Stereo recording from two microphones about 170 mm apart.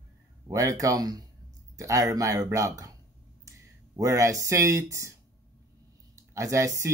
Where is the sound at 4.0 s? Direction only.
20° right (ahead or behind).